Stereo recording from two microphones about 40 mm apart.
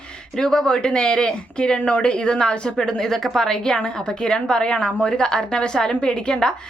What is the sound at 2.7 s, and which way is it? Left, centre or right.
A woman's voice, centre.